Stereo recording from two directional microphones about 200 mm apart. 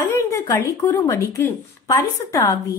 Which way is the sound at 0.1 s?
15° left (ahead or behind).